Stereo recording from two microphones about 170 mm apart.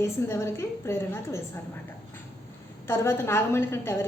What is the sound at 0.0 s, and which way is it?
A woman's voice, 15° left (ahead or behind).